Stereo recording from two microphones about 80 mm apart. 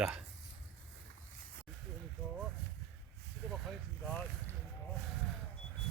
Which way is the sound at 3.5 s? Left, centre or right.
Centre.